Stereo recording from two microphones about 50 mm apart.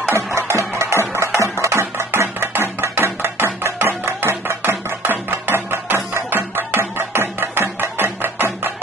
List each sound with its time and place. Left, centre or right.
0.1 s music: right